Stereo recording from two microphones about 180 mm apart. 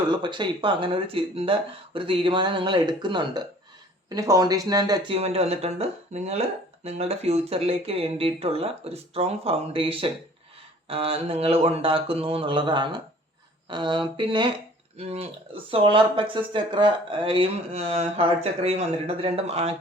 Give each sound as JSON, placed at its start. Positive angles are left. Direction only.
{"t": 0.1, "sound": "speech", "side_deg": -25}
{"t": 5.1, "sound": "speech", "side_deg": -35}